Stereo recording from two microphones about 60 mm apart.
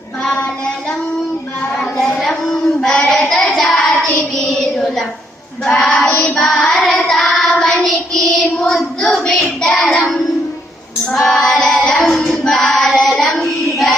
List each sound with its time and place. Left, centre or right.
0.2 s child singing: centre
1.7 s a sound: centre
2.5 s child singing: centre
6.1 s child singing: left
11.6 s music: centre
12.4 s child singing: centre